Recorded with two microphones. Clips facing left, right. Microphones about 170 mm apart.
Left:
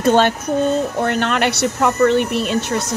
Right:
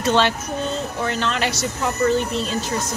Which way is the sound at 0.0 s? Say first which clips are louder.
Left 5 dB; 50° left (ahead or behind).